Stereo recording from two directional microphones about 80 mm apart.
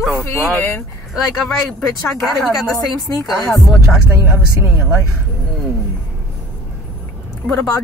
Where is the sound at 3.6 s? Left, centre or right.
Centre.